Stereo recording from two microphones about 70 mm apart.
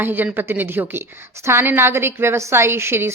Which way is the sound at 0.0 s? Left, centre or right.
Right.